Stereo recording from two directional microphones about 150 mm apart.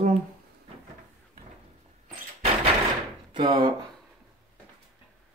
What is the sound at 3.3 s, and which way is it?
Speech, 25° right (ahead or behind).